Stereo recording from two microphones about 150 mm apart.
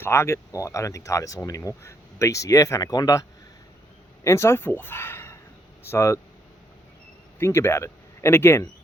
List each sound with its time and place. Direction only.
0.0 s speech: 20° left (ahead or behind)
7.3 s speech: 15° left (ahead or behind)